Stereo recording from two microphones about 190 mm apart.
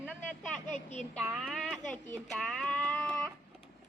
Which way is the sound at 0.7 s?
40° left (ahead or behind).